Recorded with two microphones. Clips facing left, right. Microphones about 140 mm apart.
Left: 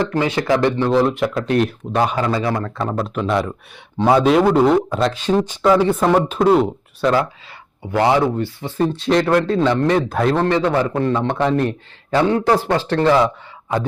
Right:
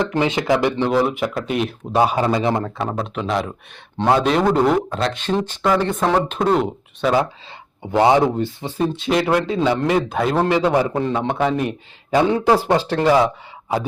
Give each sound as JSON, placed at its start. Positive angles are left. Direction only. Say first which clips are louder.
{"t": 0.1, "sound": "speech", "louder": "even", "side_deg": -20}
{"t": 2.1, "sound": "speech", "louder": "right 1 dB", "side_deg": -20}
{"t": 2.7, "sound": "speech", "louder": "left 2 dB", "side_deg": 0}
{"t": 7.8, "sound": "speech", "louder": "right 1 dB", "side_deg": -20}
{"t": 8.8, "sound": "speech", "louder": "left 2 dB", "side_deg": 0}
{"t": 10.4, "sound": "a man's voice", "louder": "even", "side_deg": -15}